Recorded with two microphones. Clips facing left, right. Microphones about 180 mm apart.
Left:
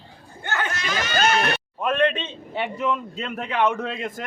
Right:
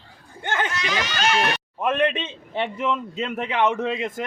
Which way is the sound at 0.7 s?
45° left (ahead or behind).